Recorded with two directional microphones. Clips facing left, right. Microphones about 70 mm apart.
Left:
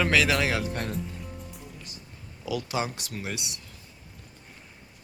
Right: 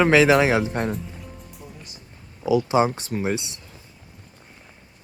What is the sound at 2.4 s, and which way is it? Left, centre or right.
Speech, right.